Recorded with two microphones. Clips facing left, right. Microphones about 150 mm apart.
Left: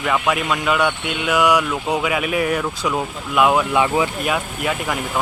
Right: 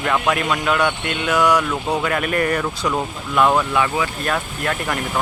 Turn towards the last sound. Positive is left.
turn(degrees=5)  # may be behind; listen again after turning